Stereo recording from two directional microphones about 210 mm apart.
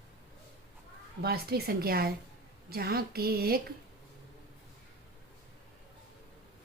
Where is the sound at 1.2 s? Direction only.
50° right (ahead or behind).